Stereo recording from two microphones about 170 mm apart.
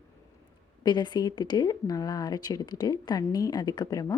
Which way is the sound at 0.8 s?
25° left (ahead or behind).